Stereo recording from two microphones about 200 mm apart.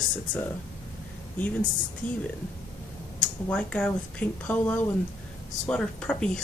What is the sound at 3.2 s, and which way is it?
Speech, 5° left (ahead or behind).